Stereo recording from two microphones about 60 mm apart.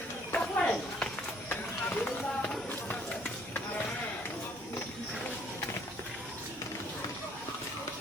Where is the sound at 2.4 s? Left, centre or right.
Centre.